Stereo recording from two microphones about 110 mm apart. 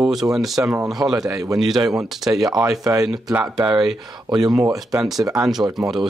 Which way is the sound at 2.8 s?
30° right (ahead or behind).